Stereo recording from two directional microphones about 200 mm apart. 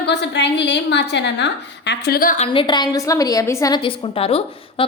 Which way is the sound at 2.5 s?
25° left (ahead or behind).